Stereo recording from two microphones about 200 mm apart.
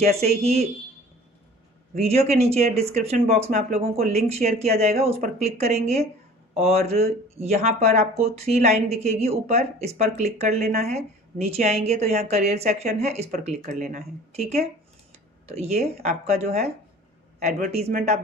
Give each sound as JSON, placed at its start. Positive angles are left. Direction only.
{"t": 0.2, "sound": "speech", "side_deg": -30}
{"t": 2.0, "sound": "speech", "side_deg": -30}